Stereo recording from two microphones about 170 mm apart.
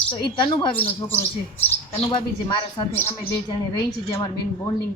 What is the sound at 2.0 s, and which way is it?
Speech, 25° left (ahead or behind).